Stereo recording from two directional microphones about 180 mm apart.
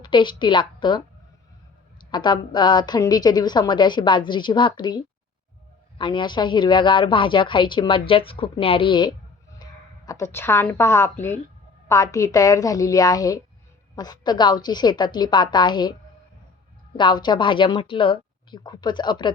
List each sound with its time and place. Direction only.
0.0 s a woman's voice: 25° left (ahead or behind)
2.0 s speech: 25° left (ahead or behind)
17.0 s speech: 25° left (ahead or behind)